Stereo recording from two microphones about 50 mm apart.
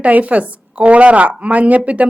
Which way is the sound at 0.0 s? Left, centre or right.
Right.